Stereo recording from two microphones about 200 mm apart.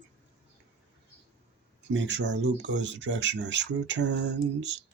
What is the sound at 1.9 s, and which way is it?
Speech, 65° right (ahead or behind).